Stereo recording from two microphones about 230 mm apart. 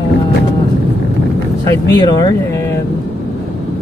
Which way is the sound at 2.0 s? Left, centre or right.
Centre.